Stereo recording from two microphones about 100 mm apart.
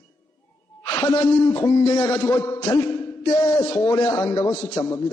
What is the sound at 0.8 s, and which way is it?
A man's voice, 35° left (ahead or behind).